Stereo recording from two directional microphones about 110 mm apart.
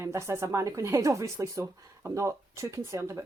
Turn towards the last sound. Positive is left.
turn(degrees=-25)  # may be behind; listen again after turning